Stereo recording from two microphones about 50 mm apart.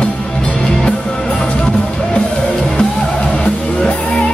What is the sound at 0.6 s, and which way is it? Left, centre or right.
Music, centre.